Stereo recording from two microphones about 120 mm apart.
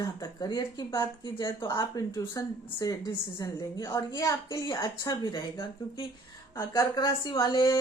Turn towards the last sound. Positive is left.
turn(degrees=35)  # may be behind; listen again after turning